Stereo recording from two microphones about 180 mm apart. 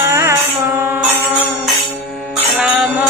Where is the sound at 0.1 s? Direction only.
15° right (ahead or behind).